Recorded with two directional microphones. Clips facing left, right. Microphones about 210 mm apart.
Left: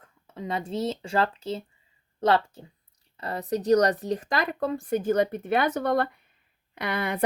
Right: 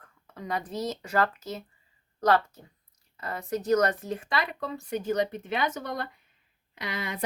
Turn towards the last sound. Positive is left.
turn(degrees=60)  # may be behind; listen again after turning